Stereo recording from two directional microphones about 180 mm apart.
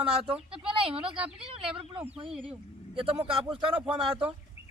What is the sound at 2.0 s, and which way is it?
Speech, 30° right (ahead or behind).